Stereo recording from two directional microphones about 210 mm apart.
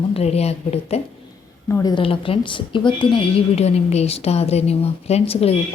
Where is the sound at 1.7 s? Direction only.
10° left (ahead or behind).